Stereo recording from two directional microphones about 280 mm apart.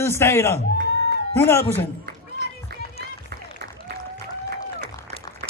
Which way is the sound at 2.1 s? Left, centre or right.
Right.